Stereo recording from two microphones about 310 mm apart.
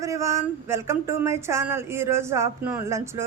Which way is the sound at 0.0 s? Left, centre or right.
Centre.